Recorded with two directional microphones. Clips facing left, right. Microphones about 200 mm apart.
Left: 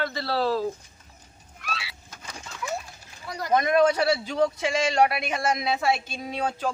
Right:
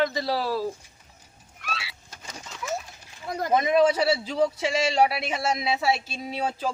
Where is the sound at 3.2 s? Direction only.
50° right (ahead or behind).